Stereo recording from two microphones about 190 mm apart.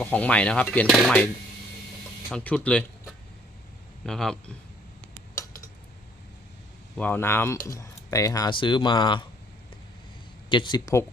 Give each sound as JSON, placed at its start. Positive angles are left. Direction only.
{"t": 0.0, "sound": "a man's voice", "side_deg": 5}
{"t": 2.3, "sound": "a man's voice", "side_deg": 10}
{"t": 6.9, "sound": "speech", "side_deg": 10}
{"t": 10.5, "sound": "speech", "side_deg": 25}